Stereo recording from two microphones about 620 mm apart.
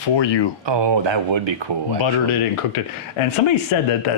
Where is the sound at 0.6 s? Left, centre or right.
Right.